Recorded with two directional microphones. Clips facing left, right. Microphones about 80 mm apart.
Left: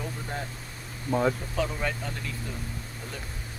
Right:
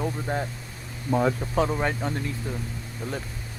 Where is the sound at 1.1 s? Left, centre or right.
Centre.